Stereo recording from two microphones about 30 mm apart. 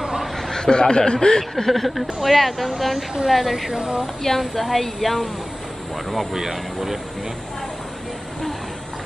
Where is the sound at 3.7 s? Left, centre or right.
Right.